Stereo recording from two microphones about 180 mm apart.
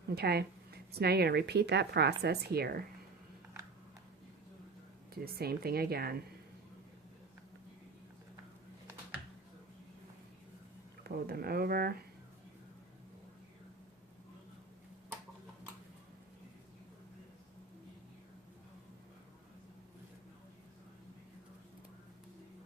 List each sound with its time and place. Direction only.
0.1 s a woman's voice: 65° right (ahead or behind)
5.2 s a woman's voice: 60° right (ahead or behind)
11.0 s a woman's voice: 60° right (ahead or behind)